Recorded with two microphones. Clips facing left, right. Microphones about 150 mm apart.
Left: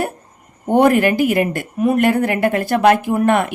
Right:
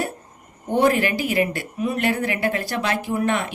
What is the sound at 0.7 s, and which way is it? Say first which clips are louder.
Speech: left 6 dB; 55° left (ahead or behind).